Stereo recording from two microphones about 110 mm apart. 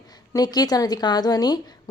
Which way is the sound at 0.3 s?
40° left (ahead or behind).